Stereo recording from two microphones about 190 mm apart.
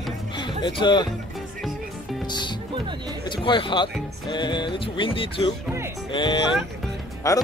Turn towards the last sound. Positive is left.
turn(degrees=20)  # may be behind; listen again after turning